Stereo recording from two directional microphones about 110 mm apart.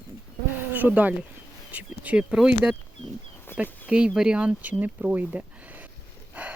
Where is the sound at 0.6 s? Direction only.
15° right (ahead or behind).